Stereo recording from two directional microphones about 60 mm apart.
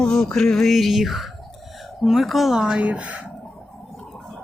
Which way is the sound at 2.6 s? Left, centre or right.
Centre.